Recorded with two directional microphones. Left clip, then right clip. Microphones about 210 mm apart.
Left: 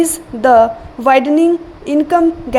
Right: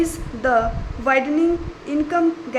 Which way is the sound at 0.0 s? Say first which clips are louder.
Left 8 dB; 30° left (ahead or behind).